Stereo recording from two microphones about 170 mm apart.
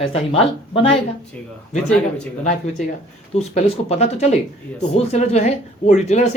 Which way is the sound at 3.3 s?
40° left (ahead or behind).